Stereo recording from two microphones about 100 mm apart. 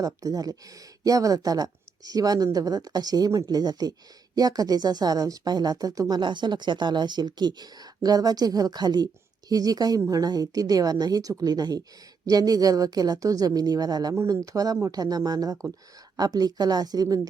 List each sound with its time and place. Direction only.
0.0 s speech: 40° right (ahead or behind)